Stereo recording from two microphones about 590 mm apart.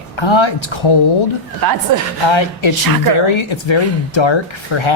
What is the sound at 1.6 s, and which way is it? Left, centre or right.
Speech, right.